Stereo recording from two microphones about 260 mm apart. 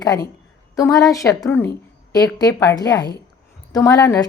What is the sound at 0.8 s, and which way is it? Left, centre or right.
A woman's voice, centre.